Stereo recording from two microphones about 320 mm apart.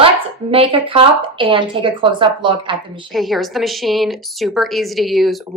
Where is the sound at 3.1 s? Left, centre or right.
Centre.